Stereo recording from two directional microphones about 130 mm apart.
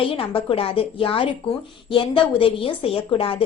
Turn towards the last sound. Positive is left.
turn(degrees=45)  # may be behind; listen again after turning